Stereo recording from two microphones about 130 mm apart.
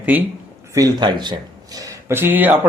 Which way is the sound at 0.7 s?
30° right (ahead or behind).